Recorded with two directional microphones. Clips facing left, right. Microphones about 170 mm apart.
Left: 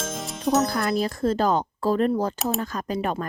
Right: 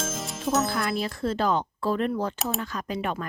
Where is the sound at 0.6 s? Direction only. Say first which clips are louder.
Left 4 dB; 40° left (ahead or behind).